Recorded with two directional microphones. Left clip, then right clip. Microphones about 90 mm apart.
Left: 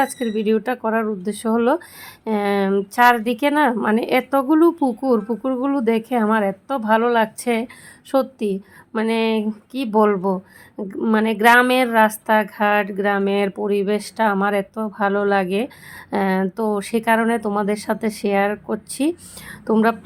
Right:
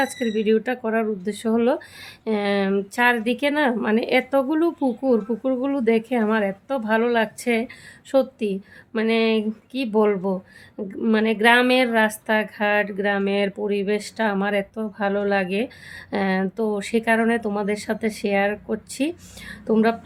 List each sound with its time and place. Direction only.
0.0 s a woman's voice: 40° left (ahead or behind)